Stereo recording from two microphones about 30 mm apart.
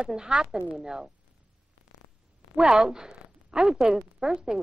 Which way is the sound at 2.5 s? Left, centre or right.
Right.